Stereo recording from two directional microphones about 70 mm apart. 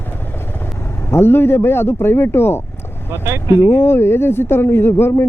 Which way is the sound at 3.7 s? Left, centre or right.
Left.